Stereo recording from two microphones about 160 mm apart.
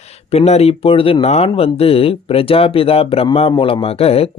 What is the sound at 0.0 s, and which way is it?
Speech, 40° left (ahead or behind).